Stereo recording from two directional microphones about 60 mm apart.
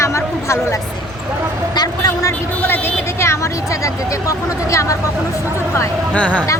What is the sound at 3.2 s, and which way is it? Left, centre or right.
Speech, left.